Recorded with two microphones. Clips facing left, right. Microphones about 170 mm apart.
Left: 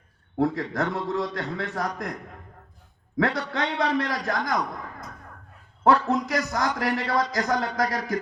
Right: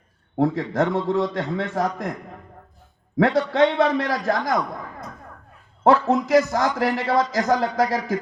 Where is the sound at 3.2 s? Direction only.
30° right (ahead or behind).